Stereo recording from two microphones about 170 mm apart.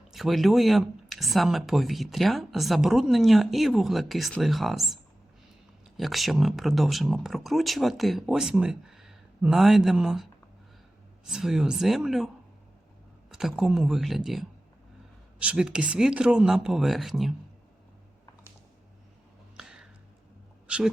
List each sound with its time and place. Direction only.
0.1 s speech: centre (ahead or behind)
6.0 s speech: centre (ahead or behind)
11.3 s speech: 5° right (ahead or behind)
13.3 s speech: 5° right (ahead or behind)
15.4 s speech: 5° right (ahead or behind)
19.5 s a sound: 5° right (ahead or behind)